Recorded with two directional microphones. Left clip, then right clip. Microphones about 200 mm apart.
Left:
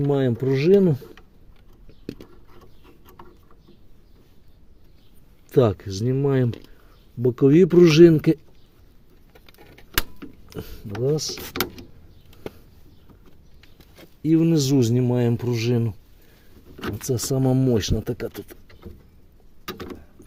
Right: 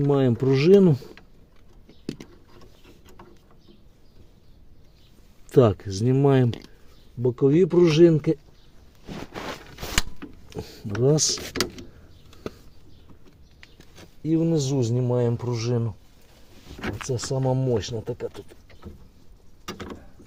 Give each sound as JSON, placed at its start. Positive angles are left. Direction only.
{"t": 0.0, "sound": "speech", "side_deg": 0}
{"t": 5.5, "sound": "speech", "side_deg": -5}
{"t": 6.1, "sound": "speech", "side_deg": -15}
{"t": 7.2, "sound": "speech", "side_deg": 25}
{"t": 10.8, "sound": "speech", "side_deg": -25}
{"t": 14.2, "sound": "speech", "side_deg": 45}
{"t": 17.1, "sound": "speech", "side_deg": 55}
{"t": 19.6, "sound": "vehicle", "side_deg": 20}